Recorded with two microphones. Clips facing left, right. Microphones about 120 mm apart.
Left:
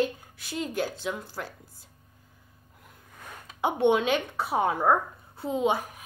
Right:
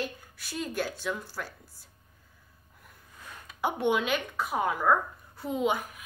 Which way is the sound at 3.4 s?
25° left (ahead or behind).